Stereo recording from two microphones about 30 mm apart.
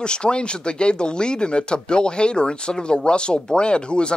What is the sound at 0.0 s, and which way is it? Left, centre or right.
Speech, left.